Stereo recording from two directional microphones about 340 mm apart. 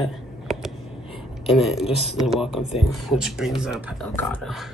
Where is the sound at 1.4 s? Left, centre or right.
Centre.